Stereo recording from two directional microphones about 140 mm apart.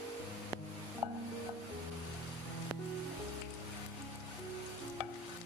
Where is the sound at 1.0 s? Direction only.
20° right (ahead or behind).